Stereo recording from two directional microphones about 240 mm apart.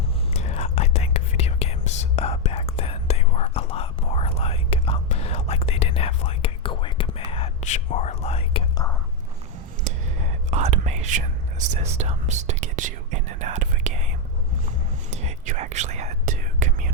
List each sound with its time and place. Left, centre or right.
0.3 s whispering: left
10.5 s whispering: right
15.1 s whispering: right